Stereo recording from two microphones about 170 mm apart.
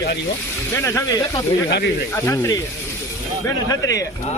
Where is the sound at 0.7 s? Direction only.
15° left (ahead or behind).